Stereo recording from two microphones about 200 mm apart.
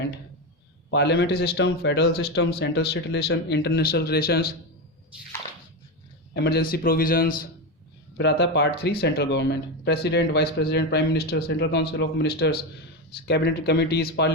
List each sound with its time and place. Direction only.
0.9 s speech: 60° left (ahead or behind)
6.3 s a man's voice: 55° left (ahead or behind)
8.2 s speech: 60° left (ahead or behind)